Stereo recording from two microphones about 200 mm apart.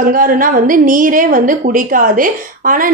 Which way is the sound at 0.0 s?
45° right (ahead or behind).